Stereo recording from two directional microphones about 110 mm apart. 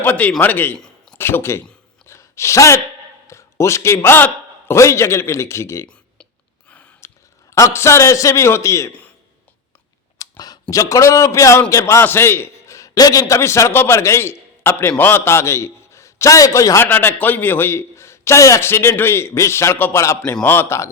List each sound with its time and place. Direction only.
0.0 s a man's voice: 15° left (ahead or behind)
2.0 s gasp: 25° left (ahead or behind)
3.2 s a man's voice: 25° left (ahead or behind)
6.7 s gasp: 10° left (ahead or behind)
7.5 s a man's voice: 25° left (ahead or behind)
10.2 s a man's voice: 35° left (ahead or behind)